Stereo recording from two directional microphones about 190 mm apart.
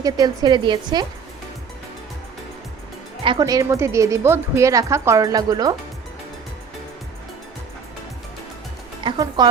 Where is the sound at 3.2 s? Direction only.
20° right (ahead or behind).